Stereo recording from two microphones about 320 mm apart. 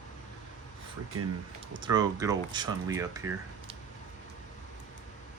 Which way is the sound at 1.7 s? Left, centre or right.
Centre.